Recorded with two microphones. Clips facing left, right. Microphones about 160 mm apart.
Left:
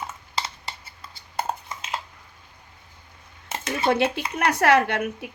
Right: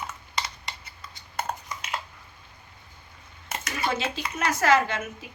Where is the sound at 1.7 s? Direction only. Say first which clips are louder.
Left 1 dB; 25° left (ahead or behind).